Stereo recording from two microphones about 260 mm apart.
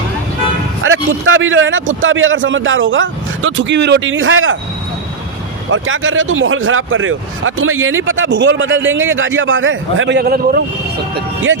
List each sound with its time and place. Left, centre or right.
0.8 s a man's voice: right
5.7 s a man's voice: right